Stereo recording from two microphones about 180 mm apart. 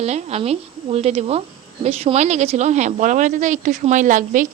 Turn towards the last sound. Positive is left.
turn(degrees=-50)  # may be behind; listen again after turning